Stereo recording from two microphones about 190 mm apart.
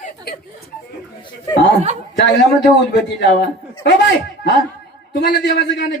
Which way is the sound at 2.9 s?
60° left (ahead or behind).